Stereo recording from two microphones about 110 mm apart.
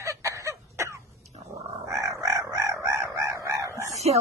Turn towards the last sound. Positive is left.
turn(degrees=-80)